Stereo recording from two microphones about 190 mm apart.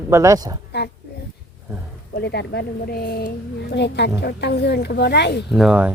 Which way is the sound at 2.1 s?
60° left (ahead or behind).